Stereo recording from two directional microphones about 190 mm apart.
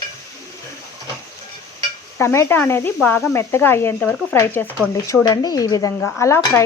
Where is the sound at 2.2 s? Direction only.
15° left (ahead or behind).